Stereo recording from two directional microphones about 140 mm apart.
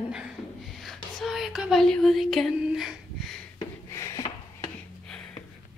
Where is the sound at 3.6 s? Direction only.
20° left (ahead or behind).